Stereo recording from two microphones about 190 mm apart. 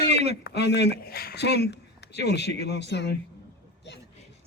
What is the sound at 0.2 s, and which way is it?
Speech, 60° left (ahead or behind).